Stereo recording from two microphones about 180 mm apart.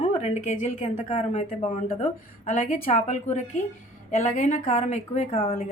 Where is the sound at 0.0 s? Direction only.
35° left (ahead or behind).